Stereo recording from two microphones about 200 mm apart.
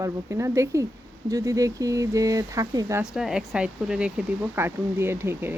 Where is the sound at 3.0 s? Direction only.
5° right (ahead or behind).